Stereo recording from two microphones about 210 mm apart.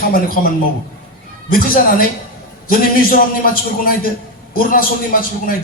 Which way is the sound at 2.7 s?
45° left (ahead or behind).